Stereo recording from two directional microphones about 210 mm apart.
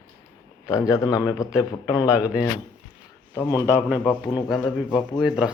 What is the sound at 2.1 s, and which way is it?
Speech, 5° right (ahead or behind).